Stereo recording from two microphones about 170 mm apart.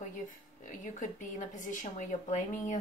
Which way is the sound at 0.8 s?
50° left (ahead or behind).